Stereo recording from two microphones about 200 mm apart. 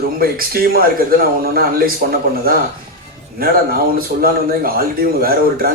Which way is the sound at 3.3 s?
50° right (ahead or behind).